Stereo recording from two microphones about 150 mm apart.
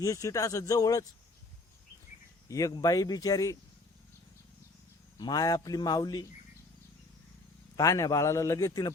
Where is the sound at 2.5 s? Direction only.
20° left (ahead or behind).